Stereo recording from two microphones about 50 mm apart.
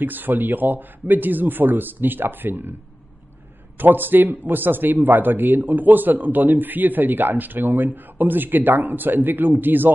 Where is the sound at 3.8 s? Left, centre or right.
Right.